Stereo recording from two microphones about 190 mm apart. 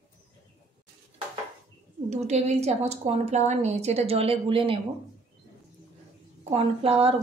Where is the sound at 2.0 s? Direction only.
35° right (ahead or behind).